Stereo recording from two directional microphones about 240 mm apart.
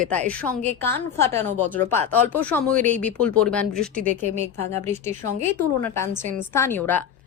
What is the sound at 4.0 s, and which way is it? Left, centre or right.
Speech, right.